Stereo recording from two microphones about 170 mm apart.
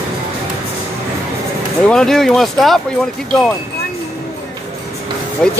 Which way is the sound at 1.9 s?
5° left (ahead or behind).